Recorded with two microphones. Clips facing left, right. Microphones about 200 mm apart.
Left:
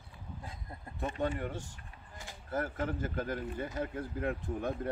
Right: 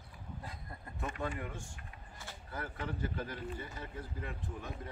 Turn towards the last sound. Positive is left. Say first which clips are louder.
# left 9 dB
turn(degrees=55)  # may be behind; listen again after turning